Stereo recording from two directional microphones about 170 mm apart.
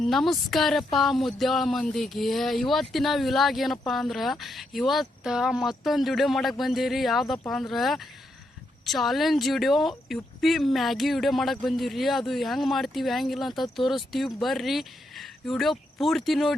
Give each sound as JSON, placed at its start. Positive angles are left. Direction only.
{"t": 0.0, "sound": "speech", "side_deg": 0}